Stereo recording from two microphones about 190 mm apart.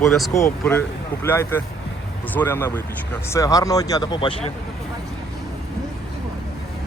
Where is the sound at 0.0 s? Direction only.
5° left (ahead or behind); by 4.4 s 25° left (ahead or behind).